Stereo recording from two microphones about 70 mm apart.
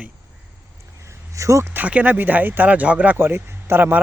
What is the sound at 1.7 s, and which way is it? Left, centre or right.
Speech, right.